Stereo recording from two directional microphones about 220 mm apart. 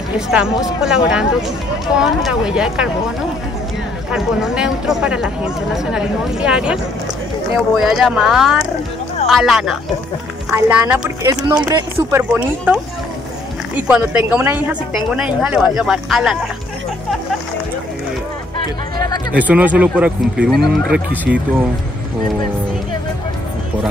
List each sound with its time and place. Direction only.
0.3 s a woman's voice: centre (ahead or behind)
4.1 s a woman's voice: centre (ahead or behind)
19.3 s a woman's voice: 5° right (ahead or behind)